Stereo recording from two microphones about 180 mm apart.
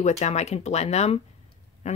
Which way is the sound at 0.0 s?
40° left (ahead or behind).